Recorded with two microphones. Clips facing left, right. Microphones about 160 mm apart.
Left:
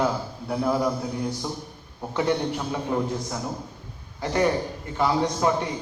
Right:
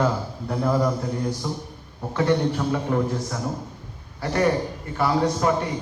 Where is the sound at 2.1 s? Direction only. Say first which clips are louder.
Right 3 dB; 15° left (ahead or behind).